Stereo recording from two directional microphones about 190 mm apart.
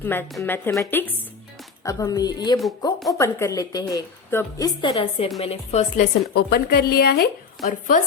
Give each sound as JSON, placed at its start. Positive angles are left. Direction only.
{"t": 0.0, "sound": "a woman's voice", "side_deg": 10}
{"t": 6.3, "sound": "speech", "side_deg": 55}
{"t": 7.6, "sound": "speech", "side_deg": 45}